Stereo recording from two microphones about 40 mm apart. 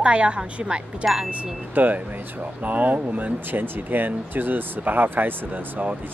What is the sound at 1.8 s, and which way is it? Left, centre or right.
Speech, right.